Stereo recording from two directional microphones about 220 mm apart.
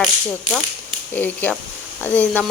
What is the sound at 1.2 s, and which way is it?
A woman's voice, 5° left (ahead or behind).